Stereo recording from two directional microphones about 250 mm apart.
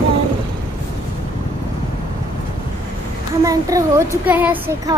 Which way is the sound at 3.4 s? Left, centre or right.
Centre.